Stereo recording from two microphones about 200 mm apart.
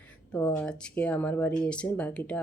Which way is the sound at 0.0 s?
10° left (ahead or behind).